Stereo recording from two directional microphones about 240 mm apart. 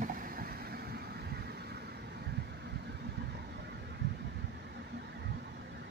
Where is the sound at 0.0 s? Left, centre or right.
Right.